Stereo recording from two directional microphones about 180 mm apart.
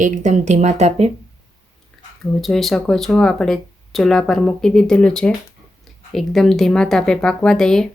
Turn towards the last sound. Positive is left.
turn(degrees=5)  # may be behind; listen again after turning